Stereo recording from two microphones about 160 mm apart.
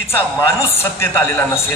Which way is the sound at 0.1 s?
15° left (ahead or behind).